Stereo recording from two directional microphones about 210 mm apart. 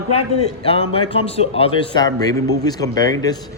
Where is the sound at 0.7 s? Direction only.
25° left (ahead or behind).